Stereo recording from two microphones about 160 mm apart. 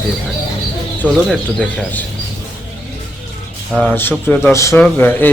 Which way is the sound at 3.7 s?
Centre (ahead or behind).